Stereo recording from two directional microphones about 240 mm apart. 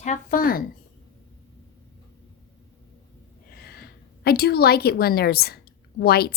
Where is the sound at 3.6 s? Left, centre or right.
Left.